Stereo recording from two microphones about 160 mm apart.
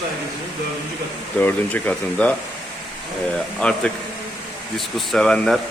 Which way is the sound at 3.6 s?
5° left (ahead or behind).